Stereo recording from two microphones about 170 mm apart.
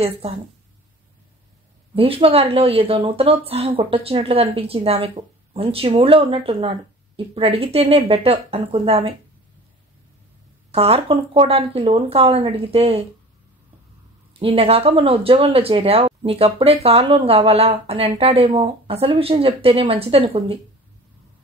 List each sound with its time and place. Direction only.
2.0 s speech: 35° right (ahead or behind)
10.7 s speech: 35° right (ahead or behind)
14.4 s speech: 35° right (ahead or behind)